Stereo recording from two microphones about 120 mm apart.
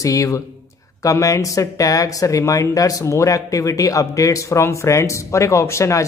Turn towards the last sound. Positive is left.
turn(degrees=25)  # may be behind; listen again after turning